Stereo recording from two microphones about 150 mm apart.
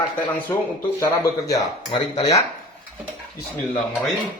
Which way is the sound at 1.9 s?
30° left (ahead or behind).